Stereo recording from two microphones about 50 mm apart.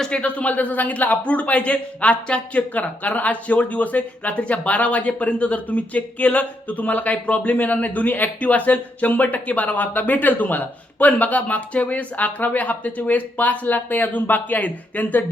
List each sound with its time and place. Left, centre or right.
0.0 s speech: left